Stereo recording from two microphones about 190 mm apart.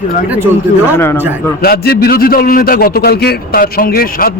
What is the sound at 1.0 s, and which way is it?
Speech, 15° left (ahead or behind).